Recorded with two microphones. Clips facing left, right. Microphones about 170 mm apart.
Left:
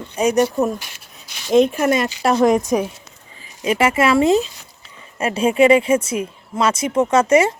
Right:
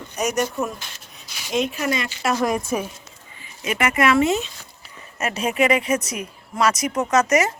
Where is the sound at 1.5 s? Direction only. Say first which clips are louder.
Left 8 dB; 55° left (ahead or behind).